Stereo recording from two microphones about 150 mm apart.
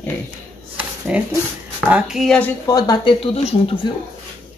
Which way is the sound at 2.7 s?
25° left (ahead or behind).